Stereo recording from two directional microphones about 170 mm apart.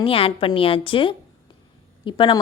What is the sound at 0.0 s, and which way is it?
A woman's voice, 35° left (ahead or behind).